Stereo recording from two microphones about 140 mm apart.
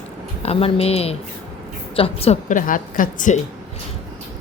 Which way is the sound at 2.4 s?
70° left (ahead or behind).